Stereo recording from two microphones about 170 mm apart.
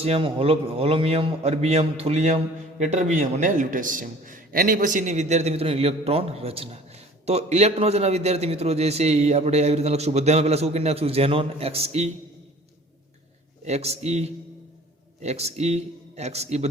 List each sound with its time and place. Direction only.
0.0 s a man's voice: 35° right (ahead or behind)
13.7 s a man's voice: 40° right (ahead or behind)